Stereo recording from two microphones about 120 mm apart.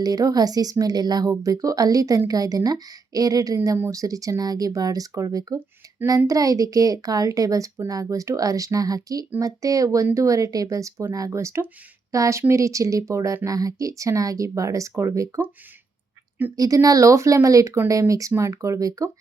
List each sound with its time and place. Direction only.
0.0 s a woman's voice: 30° right (ahead or behind)
16.6 s speech: 30° right (ahead or behind)